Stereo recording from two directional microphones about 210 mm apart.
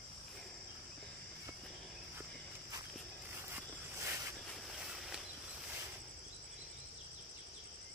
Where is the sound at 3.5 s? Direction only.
10° right (ahead or behind).